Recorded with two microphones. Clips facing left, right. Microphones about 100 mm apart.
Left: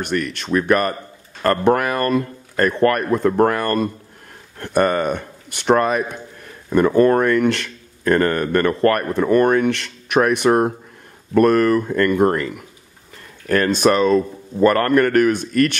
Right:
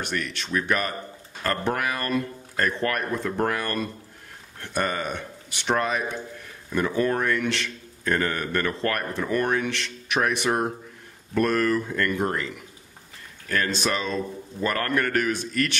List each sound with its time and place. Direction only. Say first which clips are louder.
0.0 s speech: left 7 dB; 50° left (ahead or behind)